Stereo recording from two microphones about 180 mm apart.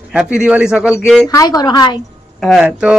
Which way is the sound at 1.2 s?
20° left (ahead or behind).